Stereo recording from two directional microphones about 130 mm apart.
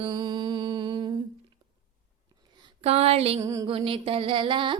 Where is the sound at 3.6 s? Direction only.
45° right (ahead or behind).